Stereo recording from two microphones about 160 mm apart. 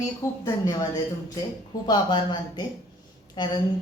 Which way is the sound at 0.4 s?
25° left (ahead or behind).